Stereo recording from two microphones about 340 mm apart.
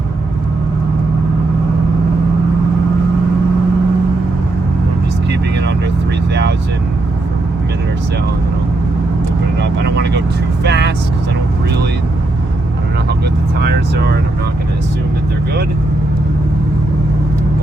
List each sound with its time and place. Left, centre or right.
5.3 s vehicle: right
9.6 s vehicle: right
13.6 s vehicle: right